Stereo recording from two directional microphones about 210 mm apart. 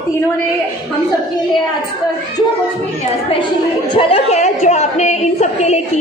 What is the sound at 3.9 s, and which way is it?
A woman's voice, 25° left (ahead or behind).